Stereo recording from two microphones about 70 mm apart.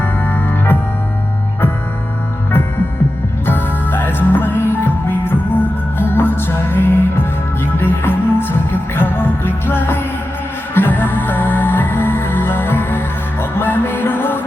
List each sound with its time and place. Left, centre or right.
0.0 s music: left
3.4 s music: left